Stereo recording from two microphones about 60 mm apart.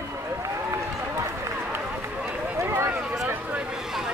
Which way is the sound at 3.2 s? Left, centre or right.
Right.